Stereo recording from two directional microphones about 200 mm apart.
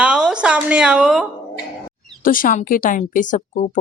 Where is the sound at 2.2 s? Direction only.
45° left (ahead or behind).